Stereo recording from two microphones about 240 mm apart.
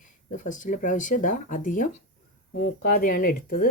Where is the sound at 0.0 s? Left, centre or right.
Left.